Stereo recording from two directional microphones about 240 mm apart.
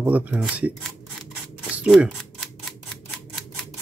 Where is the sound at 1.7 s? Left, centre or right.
Centre.